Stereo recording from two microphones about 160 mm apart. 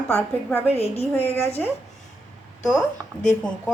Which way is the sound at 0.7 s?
40° left (ahead or behind).